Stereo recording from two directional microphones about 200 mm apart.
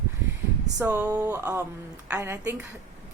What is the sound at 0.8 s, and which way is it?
A woman's voice, 15° right (ahead or behind).